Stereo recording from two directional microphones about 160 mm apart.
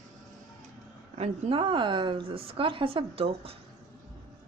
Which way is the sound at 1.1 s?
35° right (ahead or behind).